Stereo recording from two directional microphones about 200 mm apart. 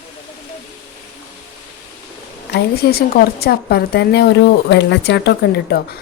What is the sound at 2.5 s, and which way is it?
A woman's voice, 55° left (ahead or behind).